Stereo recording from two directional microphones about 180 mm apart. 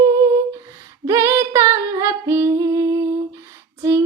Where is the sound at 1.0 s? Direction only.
15° right (ahead or behind).